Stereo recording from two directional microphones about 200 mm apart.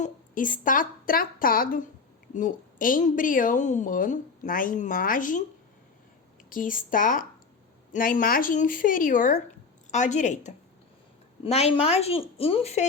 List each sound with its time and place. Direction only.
0.0 s a woman's voice: 40° left (ahead or behind)
6.5 s a woman's voice: 45° left (ahead or behind)